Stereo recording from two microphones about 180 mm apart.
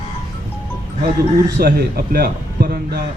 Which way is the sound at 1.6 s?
60° right (ahead or behind).